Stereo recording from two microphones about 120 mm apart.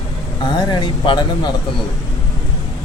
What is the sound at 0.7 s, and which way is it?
Speech, 40° left (ahead or behind).